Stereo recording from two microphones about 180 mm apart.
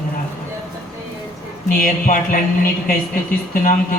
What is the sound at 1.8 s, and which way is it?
Speech, 50° left (ahead or behind).